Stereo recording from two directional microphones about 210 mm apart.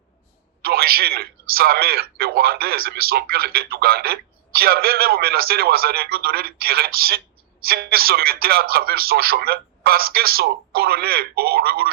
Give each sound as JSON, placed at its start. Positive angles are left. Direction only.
{"t": 0.6, "sound": "speech", "side_deg": -45}